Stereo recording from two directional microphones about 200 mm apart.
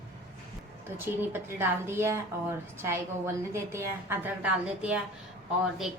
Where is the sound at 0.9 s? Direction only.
10° right (ahead or behind).